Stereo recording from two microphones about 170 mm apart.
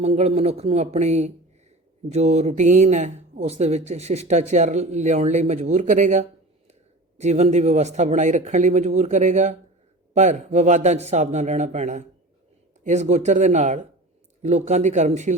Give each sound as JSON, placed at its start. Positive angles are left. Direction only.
{"t": 0.0, "sound": "speech", "side_deg": -40}